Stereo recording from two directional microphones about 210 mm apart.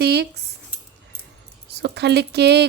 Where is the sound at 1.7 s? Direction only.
50° right (ahead or behind).